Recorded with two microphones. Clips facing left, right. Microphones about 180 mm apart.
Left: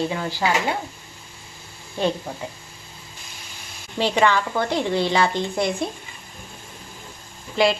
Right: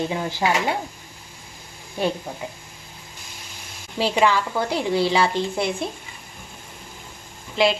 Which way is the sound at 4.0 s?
5° right (ahead or behind).